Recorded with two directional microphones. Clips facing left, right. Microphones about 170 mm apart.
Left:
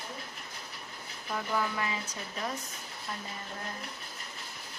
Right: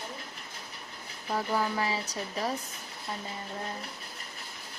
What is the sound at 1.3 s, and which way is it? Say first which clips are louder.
Speech: right 3 dB; 35° right (ahead or behind).